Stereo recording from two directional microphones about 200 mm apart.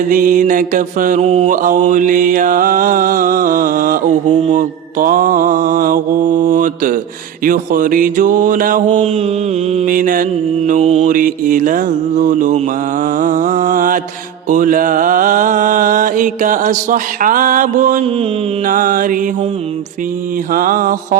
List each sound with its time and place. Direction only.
0.1 s mantra: 40° right (ahead or behind)
20.5 s mantra: 40° right (ahead or behind)